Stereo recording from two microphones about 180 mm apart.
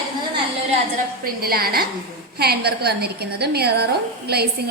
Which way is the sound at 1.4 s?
55° right (ahead or behind).